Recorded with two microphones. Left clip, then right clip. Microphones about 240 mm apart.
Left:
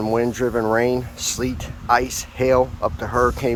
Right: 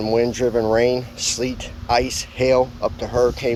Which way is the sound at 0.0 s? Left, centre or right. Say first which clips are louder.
Right 2 dB; left.